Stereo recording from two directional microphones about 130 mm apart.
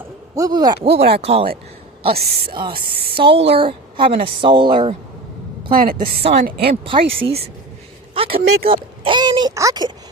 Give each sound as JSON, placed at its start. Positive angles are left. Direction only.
{"t": 0.3, "sound": "speech", "side_deg": -30}
{"t": 0.9, "sound": "speech", "side_deg": -50}
{"t": 2.0, "sound": "speech", "side_deg": -40}
{"t": 6.3, "sound": "speech", "side_deg": -45}